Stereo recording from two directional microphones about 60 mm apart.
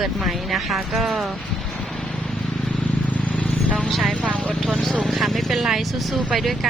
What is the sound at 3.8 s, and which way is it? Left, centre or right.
Vehicle, centre.